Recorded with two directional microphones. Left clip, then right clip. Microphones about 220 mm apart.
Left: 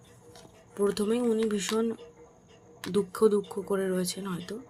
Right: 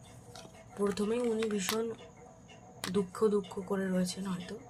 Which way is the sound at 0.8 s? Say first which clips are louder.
Left 5 dB; 45° left (ahead or behind).